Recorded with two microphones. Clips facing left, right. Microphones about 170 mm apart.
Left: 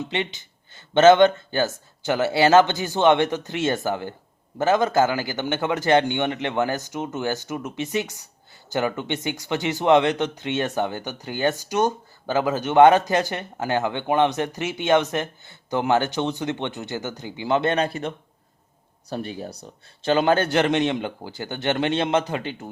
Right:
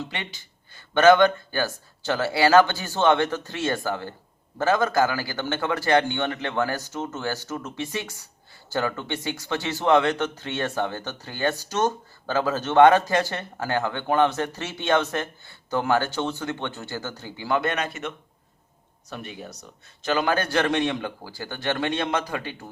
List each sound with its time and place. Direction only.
0.0 s a man's voice: 20° left (ahead or behind)
19.1 s a man's voice: 35° left (ahead or behind)